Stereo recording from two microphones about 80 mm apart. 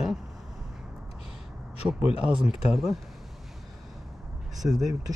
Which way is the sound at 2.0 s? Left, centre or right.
Centre.